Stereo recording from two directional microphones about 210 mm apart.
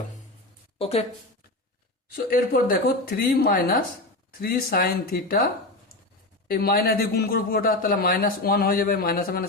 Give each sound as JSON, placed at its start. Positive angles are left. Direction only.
{"t": 0.8, "sound": "speech", "side_deg": 30}
{"t": 2.1, "sound": "a man's voice", "side_deg": 45}
{"t": 6.5, "sound": "a man's voice", "side_deg": 45}